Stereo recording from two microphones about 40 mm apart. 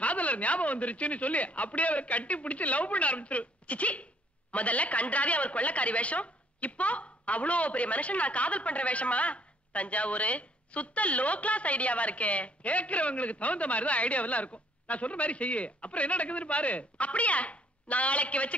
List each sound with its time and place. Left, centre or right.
0.0 s a woman's voice: left